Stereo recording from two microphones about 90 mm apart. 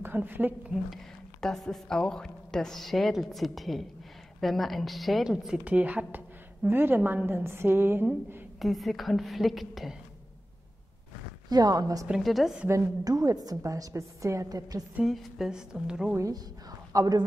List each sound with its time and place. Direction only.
0.0 s a woman's voice: 20° right (ahead or behind)
1.4 s a woman's voice: 5° left (ahead or behind)
5.6 s a woman's voice: 15° right (ahead or behind)
8.5 s a woman's voice: centre (ahead or behind)
11.4 s speech: 45° right (ahead or behind)
12.2 s a woman's voice: centre (ahead or behind)
12.6 s a woman's voice: 40° right (ahead or behind)
15.0 s speech: 5° right (ahead or behind)
16.2 s a woman's voice: 40° right (ahead or behind)